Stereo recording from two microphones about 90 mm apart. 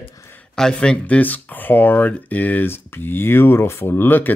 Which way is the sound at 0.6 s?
10° left (ahead or behind).